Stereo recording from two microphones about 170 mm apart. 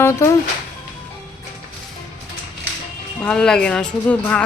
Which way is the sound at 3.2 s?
5° left (ahead or behind).